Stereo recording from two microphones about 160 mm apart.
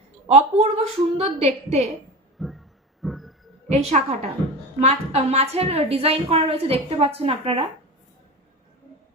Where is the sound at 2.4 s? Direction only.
Centre (ahead or behind).